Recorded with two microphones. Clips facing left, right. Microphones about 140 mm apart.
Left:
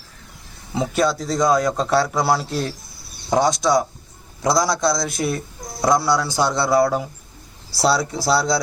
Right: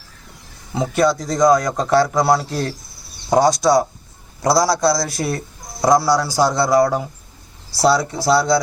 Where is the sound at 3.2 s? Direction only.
20° right (ahead or behind).